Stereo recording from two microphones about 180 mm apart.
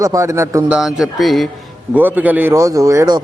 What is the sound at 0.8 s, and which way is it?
A man's voice, centre (ahead or behind).